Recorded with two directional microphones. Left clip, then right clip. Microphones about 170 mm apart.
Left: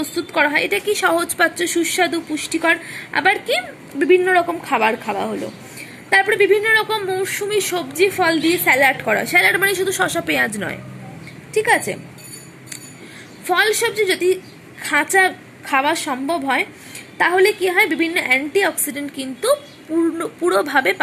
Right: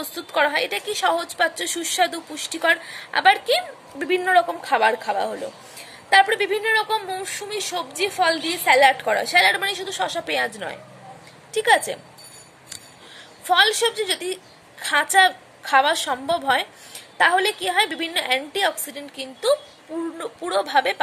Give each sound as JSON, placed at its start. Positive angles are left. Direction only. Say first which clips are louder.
{"t": 0.0, "sound": "a woman's voice", "louder": "left 3 dB", "side_deg": -25}
{"t": 1.6, "sound": "a woman's voice", "louder": "left 4 dB", "side_deg": -20}
{"t": 9.7, "sound": "speech", "louder": "left 6 dB", "side_deg": 0}
{"t": 10.2, "sound": "a woman's voice", "louder": "left 5 dB", "side_deg": -15}
{"t": 13.5, "sound": "a woman's voice", "louder": "left 1 dB", "side_deg": -20}